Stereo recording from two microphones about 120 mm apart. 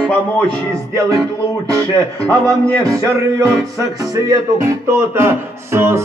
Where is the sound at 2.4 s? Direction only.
25° right (ahead or behind).